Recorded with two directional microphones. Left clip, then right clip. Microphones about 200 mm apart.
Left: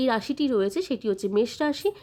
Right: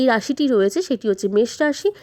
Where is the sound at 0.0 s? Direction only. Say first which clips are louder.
Right 7 dB; 30° right (ahead or behind).